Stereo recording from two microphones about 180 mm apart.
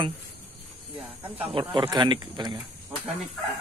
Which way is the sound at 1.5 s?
25° right (ahead or behind).